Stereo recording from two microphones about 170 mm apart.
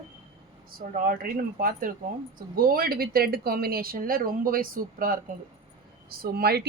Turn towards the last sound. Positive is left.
turn(degrees=-70)  # may be behind; listen again after turning